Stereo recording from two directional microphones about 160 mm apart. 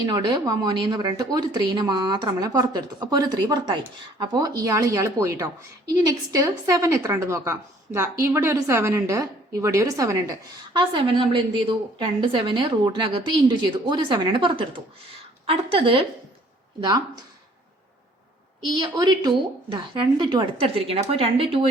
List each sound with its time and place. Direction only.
0.0 s a woman's voice: 25° right (ahead or behind)
10.8 s a woman's voice: 30° right (ahead or behind)
18.6 s a woman's voice: 25° right (ahead or behind)